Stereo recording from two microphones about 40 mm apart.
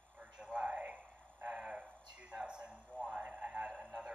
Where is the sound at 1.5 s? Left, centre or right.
Right.